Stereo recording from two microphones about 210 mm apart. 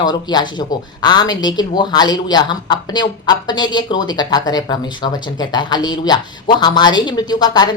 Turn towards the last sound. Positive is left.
turn(degrees=20)  # may be behind; listen again after turning